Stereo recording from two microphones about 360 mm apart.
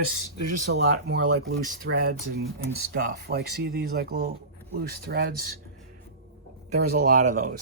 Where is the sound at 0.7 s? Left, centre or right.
Right.